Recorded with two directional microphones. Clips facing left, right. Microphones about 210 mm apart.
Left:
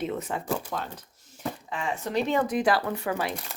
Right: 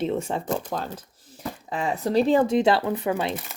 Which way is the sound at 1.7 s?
35° right (ahead or behind).